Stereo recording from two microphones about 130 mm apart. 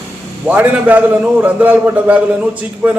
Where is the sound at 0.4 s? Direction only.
10° right (ahead or behind).